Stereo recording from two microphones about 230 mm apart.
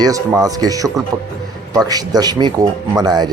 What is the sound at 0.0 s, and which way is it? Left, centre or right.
A man's voice, centre.